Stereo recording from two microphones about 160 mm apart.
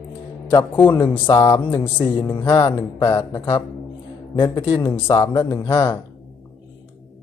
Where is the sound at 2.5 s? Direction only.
30° left (ahead or behind).